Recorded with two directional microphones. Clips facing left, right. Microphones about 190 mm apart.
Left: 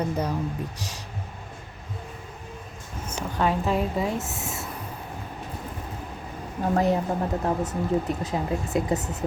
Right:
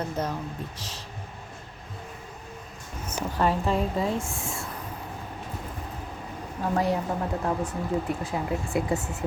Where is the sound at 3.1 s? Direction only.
Centre (ahead or behind).